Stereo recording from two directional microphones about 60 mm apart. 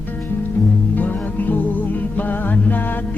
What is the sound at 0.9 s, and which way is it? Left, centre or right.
Music, left.